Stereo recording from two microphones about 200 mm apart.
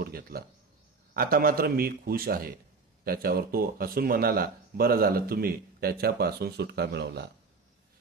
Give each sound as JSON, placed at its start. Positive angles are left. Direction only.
{"t": 0.0, "sound": "speech", "side_deg": -50}